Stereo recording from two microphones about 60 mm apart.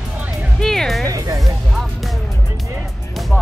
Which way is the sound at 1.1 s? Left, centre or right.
Right.